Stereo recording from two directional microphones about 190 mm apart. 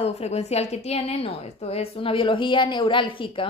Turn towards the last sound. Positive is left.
turn(degrees=25)  # may be behind; listen again after turning